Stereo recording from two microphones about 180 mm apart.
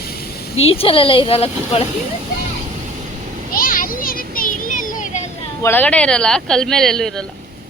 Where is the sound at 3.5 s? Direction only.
50° left (ahead or behind).